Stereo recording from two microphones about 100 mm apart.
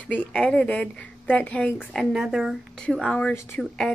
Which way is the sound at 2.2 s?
5° right (ahead or behind).